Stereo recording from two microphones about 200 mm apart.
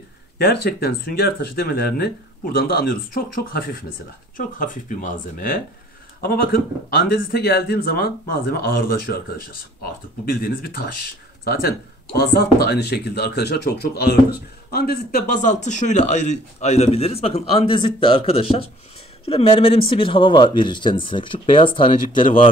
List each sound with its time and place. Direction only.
0.4 s speech: 55° left (ahead or behind); by 22.4 s 25° left (ahead or behind)